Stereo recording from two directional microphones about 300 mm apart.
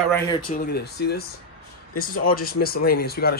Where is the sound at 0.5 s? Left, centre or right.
Left.